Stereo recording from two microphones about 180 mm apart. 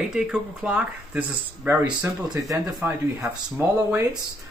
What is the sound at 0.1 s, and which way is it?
Speech, 5° right (ahead or behind).